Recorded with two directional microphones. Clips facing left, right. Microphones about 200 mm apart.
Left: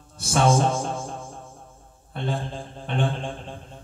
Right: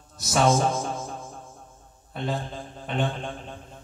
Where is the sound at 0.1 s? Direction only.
30° left (ahead or behind).